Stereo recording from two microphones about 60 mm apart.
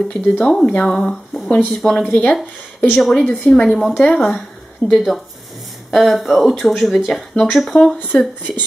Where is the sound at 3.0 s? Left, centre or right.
Centre.